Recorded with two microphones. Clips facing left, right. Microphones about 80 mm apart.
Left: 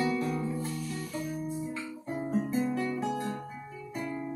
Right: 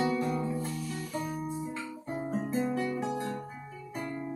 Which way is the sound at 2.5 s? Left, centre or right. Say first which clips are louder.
Right 3 dB; right.